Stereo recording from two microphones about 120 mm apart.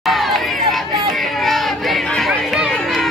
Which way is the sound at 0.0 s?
Centre (ahead or behind).